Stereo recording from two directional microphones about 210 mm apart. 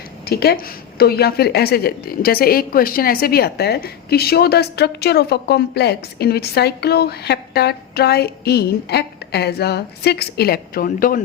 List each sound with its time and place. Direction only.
0.3 s a woman's voice: 50° left (ahead or behind)